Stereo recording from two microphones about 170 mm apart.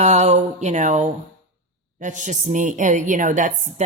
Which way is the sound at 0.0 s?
40° right (ahead or behind).